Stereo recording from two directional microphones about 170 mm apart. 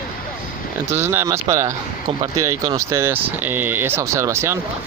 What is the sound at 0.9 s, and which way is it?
Speech, 15° right (ahead or behind).